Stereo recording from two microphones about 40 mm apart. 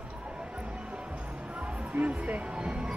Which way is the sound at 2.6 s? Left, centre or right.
Right.